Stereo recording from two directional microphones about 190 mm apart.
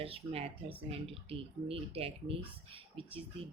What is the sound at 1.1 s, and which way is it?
Speech, 30° right (ahead or behind).